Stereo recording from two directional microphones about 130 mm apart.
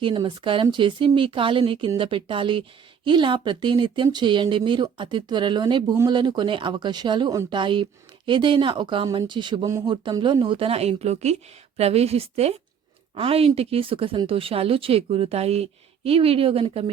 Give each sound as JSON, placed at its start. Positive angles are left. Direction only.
{"t": 0.0, "sound": "a woman's voice", "side_deg": -40}